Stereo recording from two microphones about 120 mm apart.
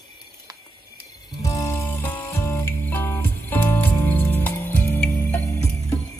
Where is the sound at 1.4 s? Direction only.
25° left (ahead or behind).